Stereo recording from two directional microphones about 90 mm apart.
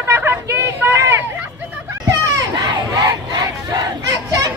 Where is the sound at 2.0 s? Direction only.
40° right (ahead or behind).